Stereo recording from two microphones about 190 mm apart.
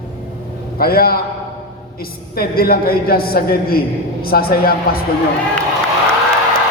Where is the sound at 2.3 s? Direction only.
50° left (ahead or behind).